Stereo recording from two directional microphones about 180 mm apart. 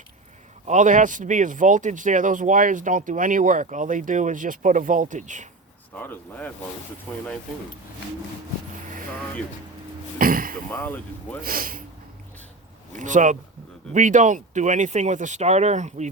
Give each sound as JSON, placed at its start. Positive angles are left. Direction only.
{"t": 0.7, "sound": "speech", "side_deg": -45}
{"t": 6.0, "sound": "speech", "side_deg": 10}
{"t": 10.2, "sound": "a sound", "side_deg": -50}
{"t": 10.7, "sound": "speech", "side_deg": 10}
{"t": 11.4, "sound": "speech", "side_deg": -50}
{"t": 13.0, "sound": "speech", "side_deg": -45}